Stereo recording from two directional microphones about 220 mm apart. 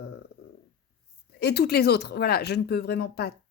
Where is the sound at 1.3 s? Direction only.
50° left (ahead or behind).